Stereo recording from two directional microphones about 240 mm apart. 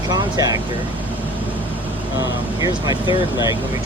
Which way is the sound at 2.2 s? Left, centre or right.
Centre.